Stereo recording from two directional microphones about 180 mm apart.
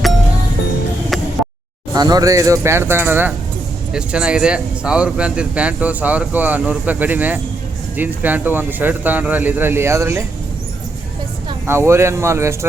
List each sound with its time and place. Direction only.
1.1 s a sound: centre (ahead or behind)
1.9 s speech: 20° right (ahead or behind)
11.6 s speech: 15° right (ahead or behind)